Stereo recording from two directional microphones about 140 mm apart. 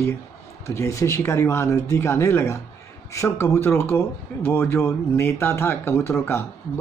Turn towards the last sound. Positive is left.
turn(degrees=15)  # may be behind; listen again after turning